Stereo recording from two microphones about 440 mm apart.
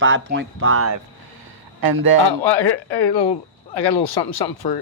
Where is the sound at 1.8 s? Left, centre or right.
Right.